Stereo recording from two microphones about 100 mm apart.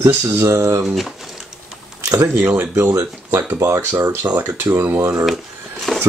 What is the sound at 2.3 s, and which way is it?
Speech, 25° right (ahead or behind).